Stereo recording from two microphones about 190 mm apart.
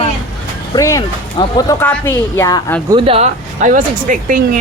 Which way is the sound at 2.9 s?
30° right (ahead or behind).